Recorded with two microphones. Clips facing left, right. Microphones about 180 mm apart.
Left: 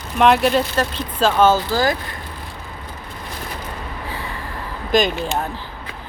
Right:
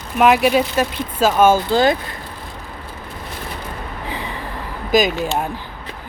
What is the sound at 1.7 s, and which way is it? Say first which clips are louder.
Speech: right 4 dB; 25° right (ahead or behind).